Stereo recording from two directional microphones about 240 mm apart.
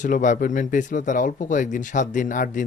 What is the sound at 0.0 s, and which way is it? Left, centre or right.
Speech, left.